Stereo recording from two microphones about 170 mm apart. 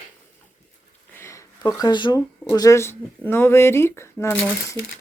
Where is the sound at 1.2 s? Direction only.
15° left (ahead or behind).